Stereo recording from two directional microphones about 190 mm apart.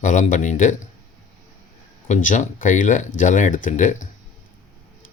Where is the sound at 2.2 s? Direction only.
45° left (ahead or behind).